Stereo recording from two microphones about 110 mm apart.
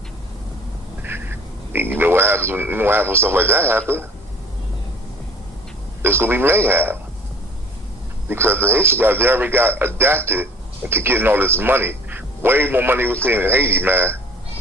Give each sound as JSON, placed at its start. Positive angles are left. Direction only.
{"t": 1.0, "sound": "speech", "side_deg": -20}
{"t": 6.0, "sound": "speech", "side_deg": -20}
{"t": 8.3, "sound": "speech", "side_deg": -20}